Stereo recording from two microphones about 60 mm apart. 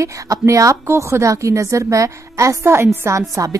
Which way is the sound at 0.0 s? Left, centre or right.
Right.